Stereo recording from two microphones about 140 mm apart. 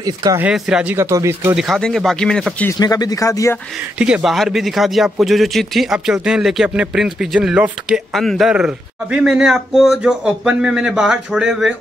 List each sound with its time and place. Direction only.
0.0 s speech: 30° right (ahead or behind)
0.4 s speech: 5° right (ahead or behind)
0.9 s speech: 20° right (ahead or behind)
1.5 s speech: centre (ahead or behind)
2.8 s speech: 25° left (ahead or behind)
4.0 s speech: 5° right (ahead or behind)